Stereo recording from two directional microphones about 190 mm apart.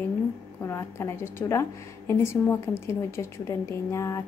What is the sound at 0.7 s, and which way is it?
A woman's voice, 15° left (ahead or behind).